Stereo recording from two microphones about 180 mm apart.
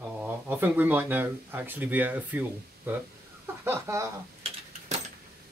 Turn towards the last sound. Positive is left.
turn(degrees=-35)  # may be behind; listen again after turning